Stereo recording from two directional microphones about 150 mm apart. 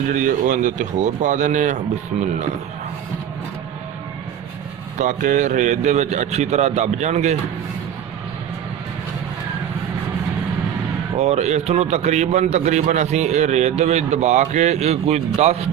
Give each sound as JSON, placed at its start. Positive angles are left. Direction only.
{"t": 0.1, "sound": "speech", "side_deg": -60}
{"t": 4.9, "sound": "a man's voice", "side_deg": -55}
{"t": 11.2, "sound": "a man's voice", "side_deg": -50}